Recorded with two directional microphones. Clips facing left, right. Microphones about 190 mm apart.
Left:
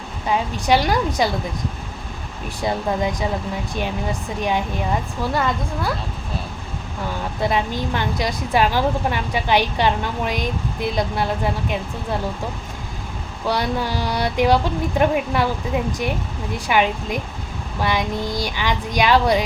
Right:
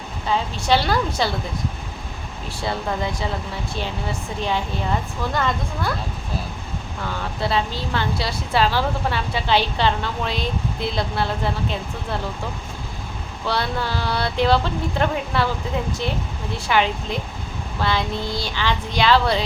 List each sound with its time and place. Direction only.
0.3 s a woman's voice: 15° left (ahead or behind)
2.6 s a woman's voice: 15° left (ahead or behind)
7.4 s a woman's voice: 15° left (ahead or behind)
13.4 s a woman's voice: 15° left (ahead or behind)